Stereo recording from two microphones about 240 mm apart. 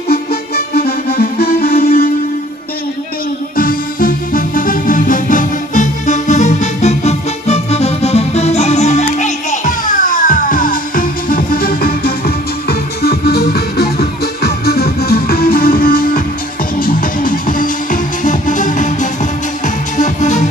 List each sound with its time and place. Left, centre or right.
0.1 s music: left
3.5 s music: left